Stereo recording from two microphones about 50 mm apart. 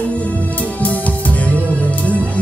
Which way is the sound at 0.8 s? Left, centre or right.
Left.